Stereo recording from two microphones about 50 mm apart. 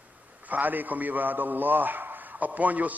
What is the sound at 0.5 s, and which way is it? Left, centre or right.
A man's voice, right.